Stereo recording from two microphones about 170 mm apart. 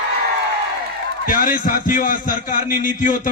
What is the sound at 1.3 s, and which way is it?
A man's voice, 50° left (ahead or behind).